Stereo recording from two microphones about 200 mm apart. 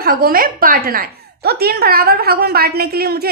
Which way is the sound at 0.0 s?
50° right (ahead or behind).